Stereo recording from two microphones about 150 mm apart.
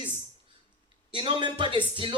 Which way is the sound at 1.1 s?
35° right (ahead or behind).